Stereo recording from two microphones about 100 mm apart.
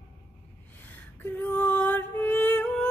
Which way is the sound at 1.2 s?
20° left (ahead or behind).